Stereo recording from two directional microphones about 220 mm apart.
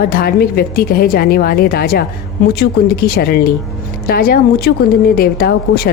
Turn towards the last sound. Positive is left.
turn(degrees=45)  # may be behind; listen again after turning